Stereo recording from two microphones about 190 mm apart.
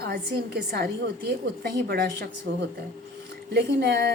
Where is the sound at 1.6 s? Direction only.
55° right (ahead or behind).